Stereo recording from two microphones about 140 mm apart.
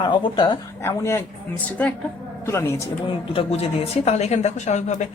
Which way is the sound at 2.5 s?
20° left (ahead or behind).